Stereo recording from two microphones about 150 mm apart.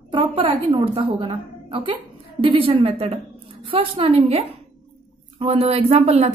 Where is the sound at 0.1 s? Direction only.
35° right (ahead or behind).